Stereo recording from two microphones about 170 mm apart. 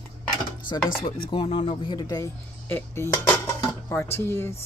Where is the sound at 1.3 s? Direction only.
30° left (ahead or behind).